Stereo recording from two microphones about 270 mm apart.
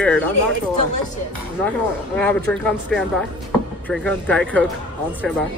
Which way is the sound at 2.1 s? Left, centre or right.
Centre.